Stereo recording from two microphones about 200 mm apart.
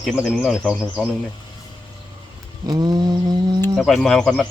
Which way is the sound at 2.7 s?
20° right (ahead or behind).